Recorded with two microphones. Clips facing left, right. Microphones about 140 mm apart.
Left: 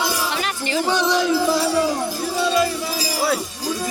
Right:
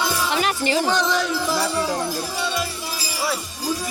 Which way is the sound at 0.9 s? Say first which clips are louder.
Left 2 dB; 10° left (ahead or behind).